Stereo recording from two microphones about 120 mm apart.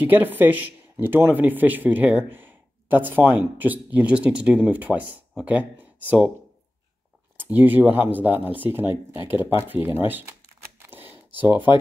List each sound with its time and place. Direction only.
0.0 s a man's voice: 15° right (ahead or behind)
7.3 s a man's voice: 15° right (ahead or behind)
10.9 s computer keyboard: 15° right (ahead or behind)
11.4 s a man's voice: 15° right (ahead or behind)